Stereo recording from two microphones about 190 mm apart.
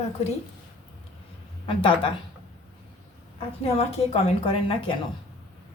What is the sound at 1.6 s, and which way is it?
Speech, 25° left (ahead or behind).